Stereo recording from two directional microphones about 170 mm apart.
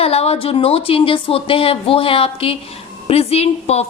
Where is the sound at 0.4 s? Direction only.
35° left (ahead or behind).